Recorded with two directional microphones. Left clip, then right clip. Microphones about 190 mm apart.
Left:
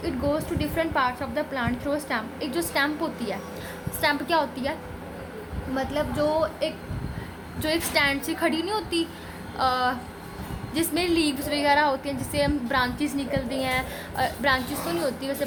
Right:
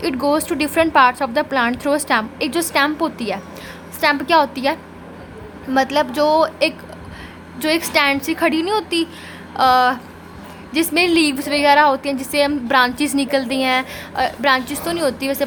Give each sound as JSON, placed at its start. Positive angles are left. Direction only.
{"t": 0.0, "sound": "a woman's voice", "side_deg": -40}
{"t": 7.6, "sound": "a woman's voice", "side_deg": -30}